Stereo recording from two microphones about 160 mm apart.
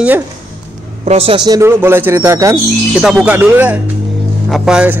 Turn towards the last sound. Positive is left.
turn(degrees=-5)  # may be behind; listen again after turning